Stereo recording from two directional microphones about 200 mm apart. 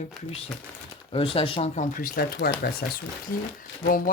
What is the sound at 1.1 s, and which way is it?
Speech, 30° left (ahead or behind).